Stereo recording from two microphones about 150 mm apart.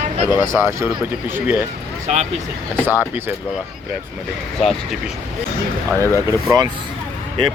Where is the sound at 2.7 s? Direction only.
15° right (ahead or behind).